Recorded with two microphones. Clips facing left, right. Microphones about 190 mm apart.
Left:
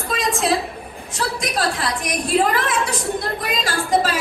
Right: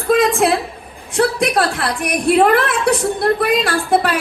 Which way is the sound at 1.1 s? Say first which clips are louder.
Right 9 dB; 60° right (ahead or behind).